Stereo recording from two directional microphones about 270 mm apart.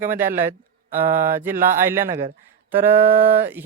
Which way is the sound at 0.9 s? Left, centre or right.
Right.